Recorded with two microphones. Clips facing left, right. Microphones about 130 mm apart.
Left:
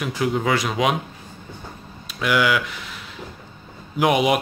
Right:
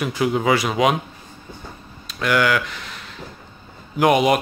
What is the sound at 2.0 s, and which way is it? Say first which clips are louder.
Speech: right 1 dB; 5° left (ahead or behind).